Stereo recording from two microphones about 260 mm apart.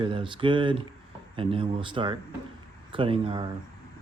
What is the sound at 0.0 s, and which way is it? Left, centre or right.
Speech, centre.